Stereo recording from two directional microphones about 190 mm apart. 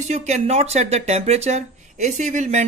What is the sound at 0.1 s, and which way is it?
Speech, 35° right (ahead or behind).